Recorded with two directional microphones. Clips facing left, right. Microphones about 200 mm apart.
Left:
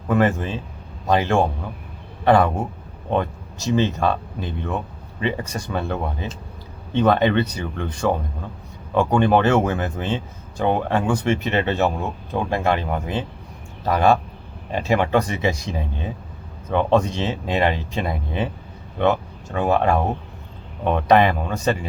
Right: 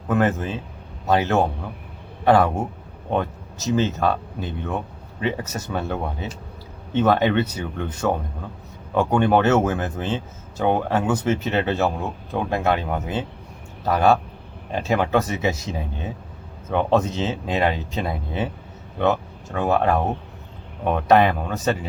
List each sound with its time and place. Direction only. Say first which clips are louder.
0.1 s speech: left 1 dB; centre (ahead or behind)
5.2 s speech: left 1 dB; 5° right (ahead or behind)